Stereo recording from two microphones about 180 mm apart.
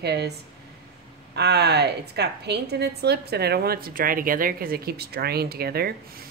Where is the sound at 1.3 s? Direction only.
65° right (ahead or behind).